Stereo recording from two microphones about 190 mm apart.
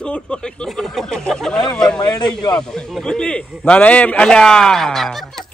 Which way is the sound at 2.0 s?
20° left (ahead or behind).